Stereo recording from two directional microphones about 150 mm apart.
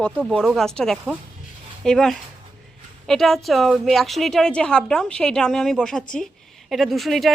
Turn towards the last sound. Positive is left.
turn(degrees=0)  # may be behind; listen again after turning